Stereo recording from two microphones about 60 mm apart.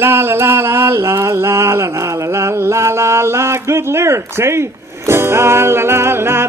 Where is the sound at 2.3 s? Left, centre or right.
Right.